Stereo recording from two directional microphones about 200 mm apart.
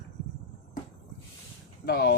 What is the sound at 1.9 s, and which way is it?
Speech, 55° left (ahead or behind).